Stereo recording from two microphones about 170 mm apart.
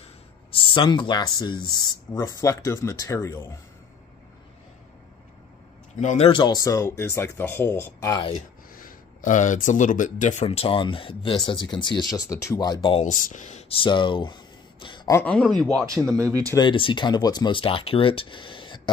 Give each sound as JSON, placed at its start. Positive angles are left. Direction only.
{"t": 0.5, "sound": "speech", "side_deg": 30}
{"t": 5.9, "sound": "speech", "side_deg": 40}
{"t": 8.7, "sound": "speech", "side_deg": 50}
{"t": 13.0, "sound": "speech", "side_deg": 45}
{"t": 15.1, "sound": "speech", "side_deg": 5}
{"t": 16.3, "sound": "speech", "side_deg": -20}
{"t": 16.5, "sound": "speech", "side_deg": 30}